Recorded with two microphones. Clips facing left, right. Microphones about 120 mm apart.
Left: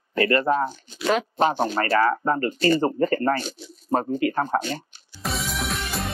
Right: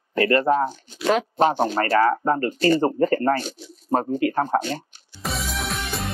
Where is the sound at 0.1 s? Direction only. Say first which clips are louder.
Right 2 dB; 45° right (ahead or behind).